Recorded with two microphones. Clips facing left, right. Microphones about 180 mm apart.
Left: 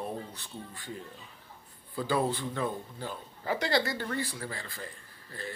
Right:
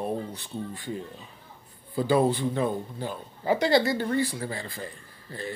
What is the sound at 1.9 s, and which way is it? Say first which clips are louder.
Speech: right 7 dB; 20° right (ahead or behind).